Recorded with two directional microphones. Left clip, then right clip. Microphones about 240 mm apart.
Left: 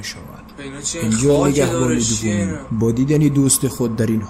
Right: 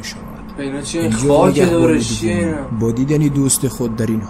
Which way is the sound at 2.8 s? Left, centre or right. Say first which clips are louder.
Left 1 dB; centre.